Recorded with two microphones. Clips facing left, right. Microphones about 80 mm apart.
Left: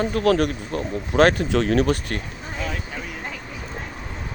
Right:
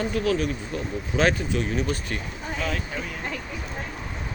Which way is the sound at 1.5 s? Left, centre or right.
Left.